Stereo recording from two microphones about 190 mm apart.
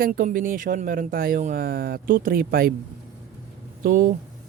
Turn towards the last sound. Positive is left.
turn(degrees=-45)  # may be behind; listen again after turning